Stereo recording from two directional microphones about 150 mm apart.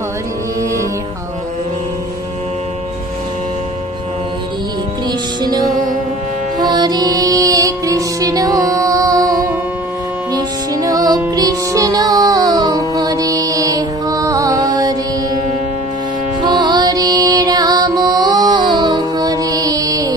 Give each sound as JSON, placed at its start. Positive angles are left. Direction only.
{"t": 5.7, "sound": "music", "side_deg": -65}
{"t": 6.6, "sound": "music", "side_deg": -25}
{"t": 16.3, "sound": "music", "side_deg": -30}